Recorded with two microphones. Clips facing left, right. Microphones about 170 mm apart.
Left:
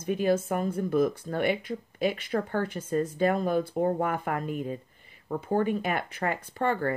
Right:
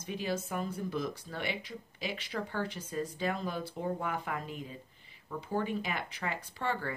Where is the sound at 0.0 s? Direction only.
55° left (ahead or behind).